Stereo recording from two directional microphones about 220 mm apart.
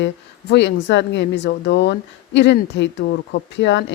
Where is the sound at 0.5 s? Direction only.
55° left (ahead or behind).